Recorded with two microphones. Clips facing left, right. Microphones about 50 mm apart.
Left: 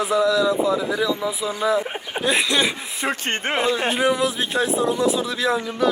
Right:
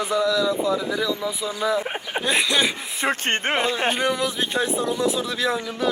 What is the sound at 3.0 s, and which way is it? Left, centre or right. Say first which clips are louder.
Speech: right 1 dB; centre.